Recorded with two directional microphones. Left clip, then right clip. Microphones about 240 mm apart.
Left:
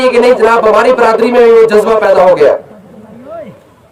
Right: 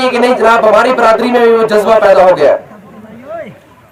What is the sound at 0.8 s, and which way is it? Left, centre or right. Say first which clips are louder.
Speech: left 1 dB; left.